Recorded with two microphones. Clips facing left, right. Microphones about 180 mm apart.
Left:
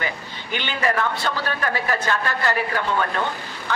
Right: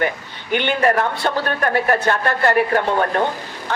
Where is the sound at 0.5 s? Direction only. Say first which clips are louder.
Right 7 dB; 55° right (ahead or behind).